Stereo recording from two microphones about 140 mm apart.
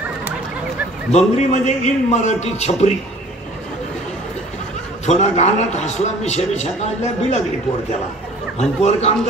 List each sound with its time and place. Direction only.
1.1 s a man's voice: 55° left (ahead or behind)
5.0 s a man's voice: 55° left (ahead or behind)
8.5 s a man's voice: 50° left (ahead or behind)